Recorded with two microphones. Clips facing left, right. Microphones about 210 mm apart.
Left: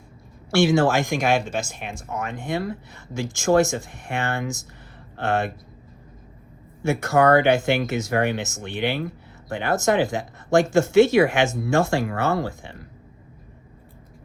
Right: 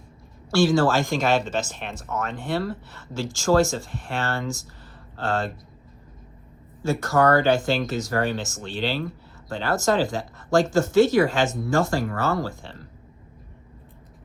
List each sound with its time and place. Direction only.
0.5 s speech: 25° left (ahead or behind)
6.8 s speech: 25° left (ahead or behind)